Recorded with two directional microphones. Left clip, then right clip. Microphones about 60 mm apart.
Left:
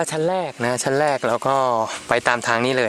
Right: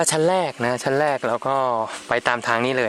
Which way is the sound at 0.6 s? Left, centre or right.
Centre.